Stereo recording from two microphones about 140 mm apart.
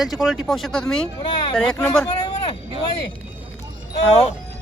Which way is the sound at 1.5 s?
5° left (ahead or behind).